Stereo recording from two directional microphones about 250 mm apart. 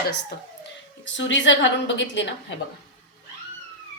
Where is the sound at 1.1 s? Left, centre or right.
Left.